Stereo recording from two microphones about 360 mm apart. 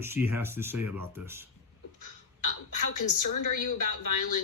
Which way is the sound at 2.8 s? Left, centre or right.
Left.